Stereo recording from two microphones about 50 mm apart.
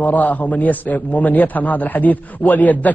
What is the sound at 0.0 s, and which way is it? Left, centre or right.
A man's voice, left.